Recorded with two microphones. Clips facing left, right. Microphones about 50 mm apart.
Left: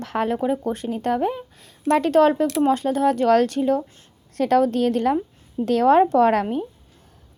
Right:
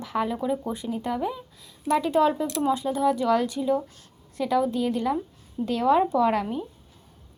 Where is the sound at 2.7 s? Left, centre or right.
Left.